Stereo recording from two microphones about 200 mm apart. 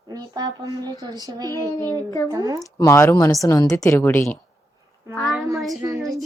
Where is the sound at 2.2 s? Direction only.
15° right (ahead or behind).